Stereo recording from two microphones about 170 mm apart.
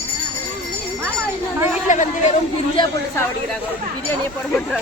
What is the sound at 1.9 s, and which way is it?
Speech, 45° left (ahead or behind).